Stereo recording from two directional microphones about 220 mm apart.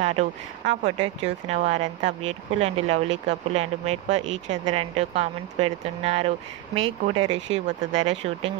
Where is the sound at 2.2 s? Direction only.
30° right (ahead or behind).